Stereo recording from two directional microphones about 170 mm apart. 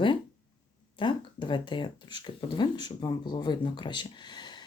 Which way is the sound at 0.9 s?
30° left (ahead or behind).